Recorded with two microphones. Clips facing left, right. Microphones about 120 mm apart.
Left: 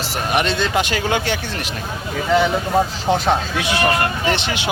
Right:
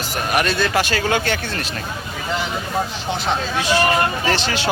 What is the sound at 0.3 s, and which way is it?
Speech, 20° left (ahead or behind).